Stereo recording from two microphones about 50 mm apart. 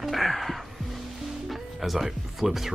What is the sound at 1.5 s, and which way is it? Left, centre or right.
Speech, centre.